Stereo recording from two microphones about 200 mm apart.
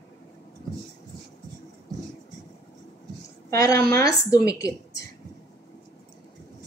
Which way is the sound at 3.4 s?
15° left (ahead or behind).